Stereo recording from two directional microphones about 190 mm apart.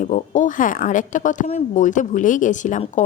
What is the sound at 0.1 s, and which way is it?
Speech, 45° left (ahead or behind).